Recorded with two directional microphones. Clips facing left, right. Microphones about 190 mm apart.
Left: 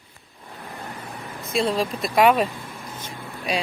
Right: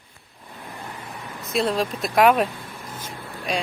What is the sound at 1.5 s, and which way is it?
Speech, centre (ahead or behind).